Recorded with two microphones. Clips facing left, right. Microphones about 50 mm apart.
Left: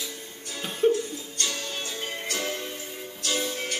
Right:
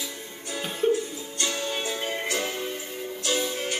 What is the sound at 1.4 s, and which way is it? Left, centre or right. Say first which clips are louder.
Music: right 4 dB; centre.